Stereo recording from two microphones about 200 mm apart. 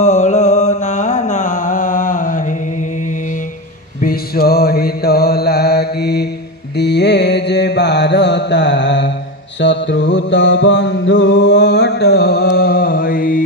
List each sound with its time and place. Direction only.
0.0 s music: 35° left (ahead or behind)
4.0 s mantra: 50° left (ahead or behind)
9.6 s music: 60° left (ahead or behind); by 13.4 s 45° left (ahead or behind)